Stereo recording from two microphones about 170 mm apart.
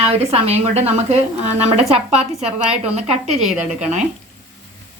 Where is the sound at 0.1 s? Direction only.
35° right (ahead or behind).